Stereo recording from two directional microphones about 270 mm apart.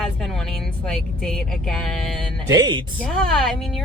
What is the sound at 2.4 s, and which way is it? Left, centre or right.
Speech, centre.